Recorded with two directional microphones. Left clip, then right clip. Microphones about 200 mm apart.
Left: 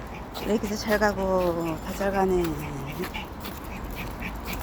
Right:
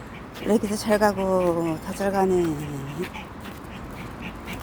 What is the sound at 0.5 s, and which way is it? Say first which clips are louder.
A woman's voice: right 4 dB; 20° right (ahead or behind).